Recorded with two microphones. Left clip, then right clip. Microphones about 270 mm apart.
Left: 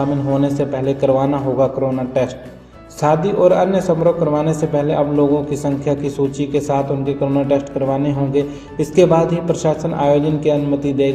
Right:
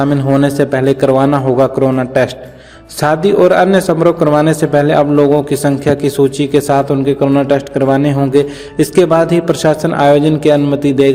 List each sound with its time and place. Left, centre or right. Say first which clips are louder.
0.3 s a man's voice: right 7 dB; right